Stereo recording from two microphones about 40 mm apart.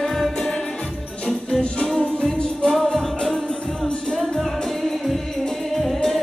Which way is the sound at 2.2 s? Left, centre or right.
Centre.